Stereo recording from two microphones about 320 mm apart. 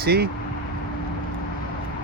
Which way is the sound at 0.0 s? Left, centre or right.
Right.